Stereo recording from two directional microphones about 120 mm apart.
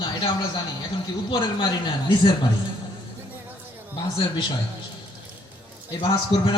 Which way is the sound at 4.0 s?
40° left (ahead or behind).